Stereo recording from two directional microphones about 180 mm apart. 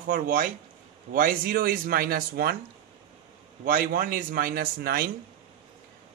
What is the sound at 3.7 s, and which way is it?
Speech, 50° right (ahead or behind).